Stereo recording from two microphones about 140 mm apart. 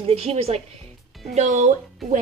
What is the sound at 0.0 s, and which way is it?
Speech, 45° right (ahead or behind).